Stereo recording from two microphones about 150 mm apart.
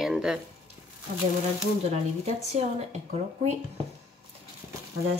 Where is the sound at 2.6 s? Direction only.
45° right (ahead or behind).